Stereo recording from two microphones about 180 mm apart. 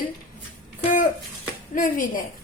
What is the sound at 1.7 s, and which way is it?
Speech, 45° left (ahead or behind).